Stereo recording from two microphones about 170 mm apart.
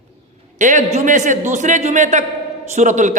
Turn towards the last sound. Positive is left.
turn(degrees=-45)  # may be behind; listen again after turning